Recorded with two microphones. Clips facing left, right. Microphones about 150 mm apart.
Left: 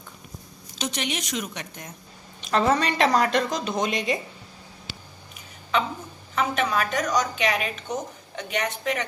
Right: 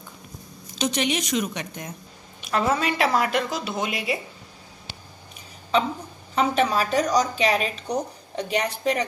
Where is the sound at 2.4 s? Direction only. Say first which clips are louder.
Left 1 dB; 5° right (ahead or behind).